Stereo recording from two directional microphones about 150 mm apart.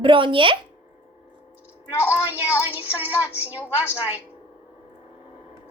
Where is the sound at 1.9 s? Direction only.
15° left (ahead or behind).